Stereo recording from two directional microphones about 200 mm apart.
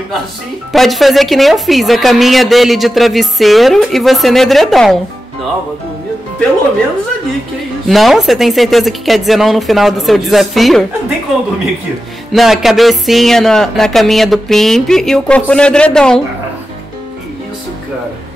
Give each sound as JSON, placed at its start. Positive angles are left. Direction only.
{"t": 0.7, "sound": "a woman's voice", "side_deg": 0}
{"t": 7.9, "sound": "a woman's voice", "side_deg": 0}
{"t": 12.3, "sound": "a woman's voice", "side_deg": 0}